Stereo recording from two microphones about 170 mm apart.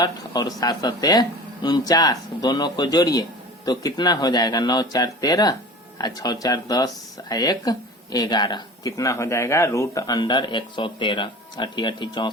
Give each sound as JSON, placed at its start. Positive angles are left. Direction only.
{"t": 0.0, "sound": "speech", "side_deg": 25}